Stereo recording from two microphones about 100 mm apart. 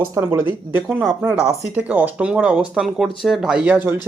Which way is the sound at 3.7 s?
20° right (ahead or behind).